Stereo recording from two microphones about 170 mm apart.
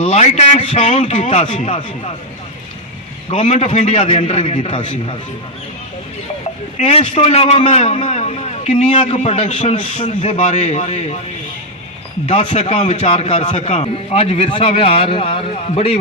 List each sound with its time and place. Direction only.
0.0 s a man's voice: 40° left (ahead or behind)
3.2 s a man's voice: 40° left (ahead or behind)
6.8 s a man's voice: 35° left (ahead or behind)
12.2 s a man's voice: 35° left (ahead or behind)